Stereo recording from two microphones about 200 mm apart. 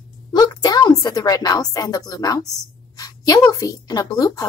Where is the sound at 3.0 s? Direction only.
20° left (ahead or behind).